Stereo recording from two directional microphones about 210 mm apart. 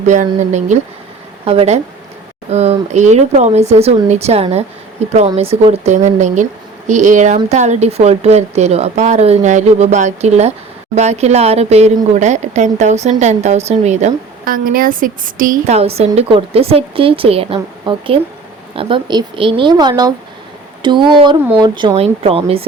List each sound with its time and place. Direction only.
0.0 s speech: 35° right (ahead or behind)